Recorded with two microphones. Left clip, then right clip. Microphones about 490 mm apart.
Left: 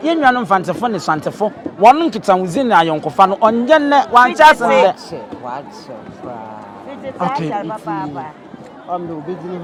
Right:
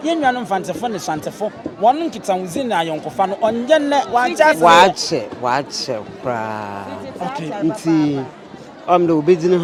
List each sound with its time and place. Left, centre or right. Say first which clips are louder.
0.0 s a man's voice: left 4 dB; centre
4.9 s speech: right 7 dB; right
7.2 s a man's voice: left 7 dB; centre
8.9 s speech: right 10 dB; right